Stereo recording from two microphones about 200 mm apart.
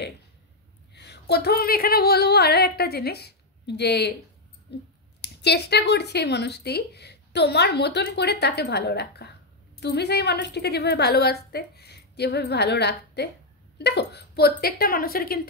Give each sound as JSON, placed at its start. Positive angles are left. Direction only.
{"t": 0.9, "sound": "a woman's voice", "side_deg": 55}